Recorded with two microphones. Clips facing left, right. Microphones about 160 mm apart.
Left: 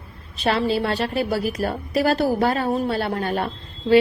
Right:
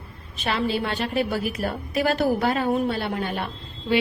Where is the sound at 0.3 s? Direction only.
35° left (ahead or behind).